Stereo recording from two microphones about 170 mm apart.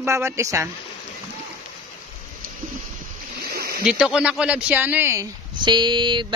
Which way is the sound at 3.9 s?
5° right (ahead or behind).